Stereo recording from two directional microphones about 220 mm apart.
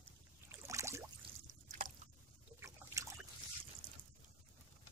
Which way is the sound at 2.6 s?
15° right (ahead or behind).